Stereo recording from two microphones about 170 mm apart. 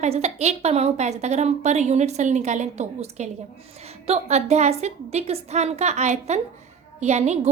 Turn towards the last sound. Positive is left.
turn(degrees=-40)  # may be behind; listen again after turning